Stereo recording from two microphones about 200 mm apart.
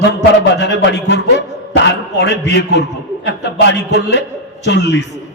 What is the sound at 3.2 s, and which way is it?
A man's voice, 60° left (ahead or behind).